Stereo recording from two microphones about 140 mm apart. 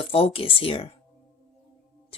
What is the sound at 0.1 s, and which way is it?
Speech, 45° left (ahead or behind).